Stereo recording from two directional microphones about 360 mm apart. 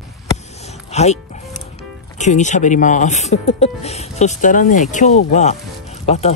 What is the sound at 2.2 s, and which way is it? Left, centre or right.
Speech, centre.